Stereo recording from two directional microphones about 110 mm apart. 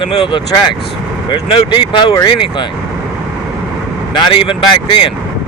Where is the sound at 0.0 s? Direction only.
50° left (ahead or behind).